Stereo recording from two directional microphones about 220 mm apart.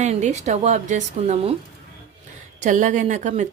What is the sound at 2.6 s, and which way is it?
Speech, 35° right (ahead or behind).